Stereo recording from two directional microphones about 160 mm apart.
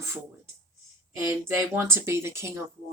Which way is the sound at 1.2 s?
15° right (ahead or behind).